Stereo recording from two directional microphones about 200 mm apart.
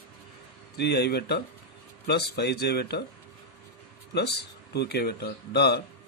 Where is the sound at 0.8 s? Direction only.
55° left (ahead or behind).